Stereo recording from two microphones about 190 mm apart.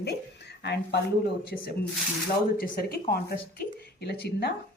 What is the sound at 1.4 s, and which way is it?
Speech, 50° left (ahead or behind).